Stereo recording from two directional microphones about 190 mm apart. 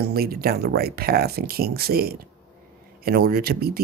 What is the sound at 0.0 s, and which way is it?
Speech, 55° right (ahead or behind).